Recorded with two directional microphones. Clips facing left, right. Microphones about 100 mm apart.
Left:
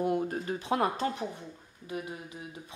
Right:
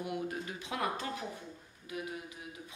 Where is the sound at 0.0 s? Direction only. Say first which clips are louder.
Left 8 dB; 40° left (ahead or behind).